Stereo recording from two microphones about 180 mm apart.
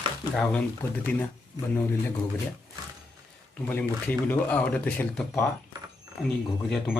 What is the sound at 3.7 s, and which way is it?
Speech, 10° left (ahead or behind).